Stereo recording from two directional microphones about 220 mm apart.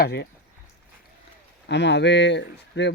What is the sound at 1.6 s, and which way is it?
Speech, 50° left (ahead or behind).